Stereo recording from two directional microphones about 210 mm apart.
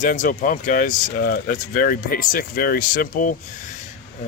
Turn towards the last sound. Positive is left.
turn(degrees=40)  # may be behind; listen again after turning